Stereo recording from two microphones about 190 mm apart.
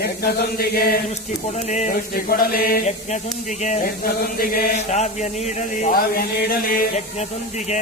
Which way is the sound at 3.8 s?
50° left (ahead or behind).